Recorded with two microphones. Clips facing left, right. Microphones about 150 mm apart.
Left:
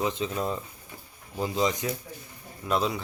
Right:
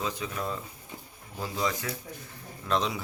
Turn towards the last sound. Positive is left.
turn(degrees=5)  # may be behind; listen again after turning